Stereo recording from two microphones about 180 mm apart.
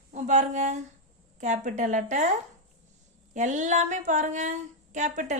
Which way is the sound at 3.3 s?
40° right (ahead or behind).